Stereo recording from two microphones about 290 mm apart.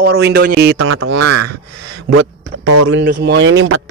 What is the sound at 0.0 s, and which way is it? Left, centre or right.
Speech, right.